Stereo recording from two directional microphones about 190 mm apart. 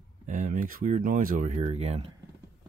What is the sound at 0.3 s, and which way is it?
Speech, 45° right (ahead or behind).